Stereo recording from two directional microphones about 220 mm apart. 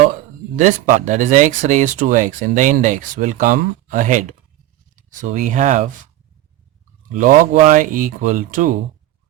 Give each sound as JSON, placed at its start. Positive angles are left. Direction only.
{"t": 0.5, "sound": "speech", "side_deg": -35}
{"t": 7.1, "sound": "speech", "side_deg": -35}